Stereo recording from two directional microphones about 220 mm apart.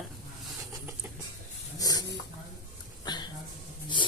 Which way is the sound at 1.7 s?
15° left (ahead or behind).